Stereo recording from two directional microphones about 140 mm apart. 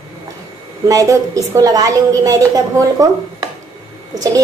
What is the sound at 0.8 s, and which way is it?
A woman's voice, 25° right (ahead or behind).